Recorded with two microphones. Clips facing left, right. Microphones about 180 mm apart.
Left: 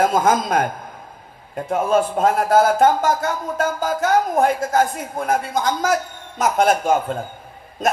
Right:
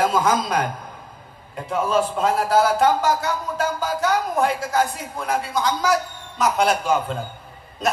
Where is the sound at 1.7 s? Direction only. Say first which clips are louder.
Left 3 dB; 50° left (ahead or behind).